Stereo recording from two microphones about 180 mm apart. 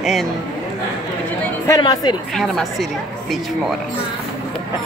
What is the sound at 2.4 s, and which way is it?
Speech, centre (ahead or behind).